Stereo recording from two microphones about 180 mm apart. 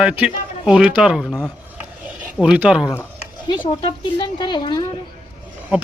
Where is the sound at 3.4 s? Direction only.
25° left (ahead or behind).